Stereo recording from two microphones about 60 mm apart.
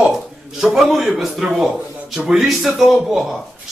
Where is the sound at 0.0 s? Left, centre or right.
Centre.